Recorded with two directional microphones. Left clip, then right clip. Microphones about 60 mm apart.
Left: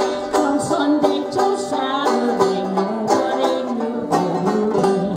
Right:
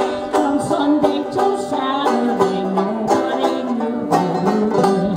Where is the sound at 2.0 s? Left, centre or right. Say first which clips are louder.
Even; centre.